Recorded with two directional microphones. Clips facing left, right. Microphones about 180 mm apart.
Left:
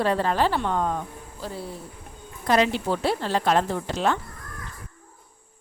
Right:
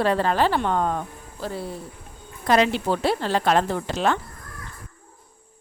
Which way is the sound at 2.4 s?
80° right.